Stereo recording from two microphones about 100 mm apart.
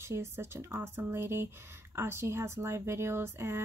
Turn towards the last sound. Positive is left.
turn(degrees=-25)  # may be behind; listen again after turning